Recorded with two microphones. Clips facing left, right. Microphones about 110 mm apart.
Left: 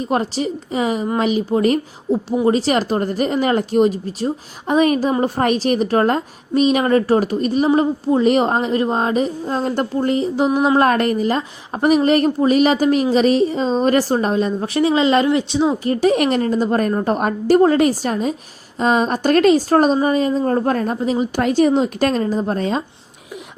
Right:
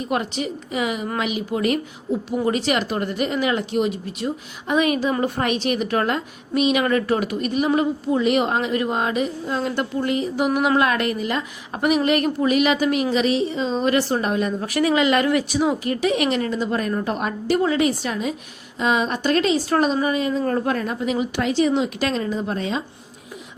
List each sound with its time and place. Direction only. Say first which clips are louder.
0.0 s a woman's voice: left 4 dB; 35° left (ahead or behind)
10.8 s a woman's voice: left 5 dB; 40° left (ahead or behind)